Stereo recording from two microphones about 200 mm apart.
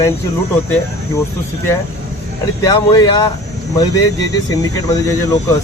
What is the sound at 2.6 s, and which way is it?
Speech, 20° left (ahead or behind).